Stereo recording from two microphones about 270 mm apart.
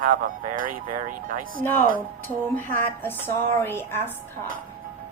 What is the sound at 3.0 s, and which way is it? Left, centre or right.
A woman's voice, centre.